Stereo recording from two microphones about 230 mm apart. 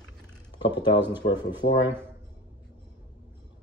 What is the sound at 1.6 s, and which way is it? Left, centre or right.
Speech, left.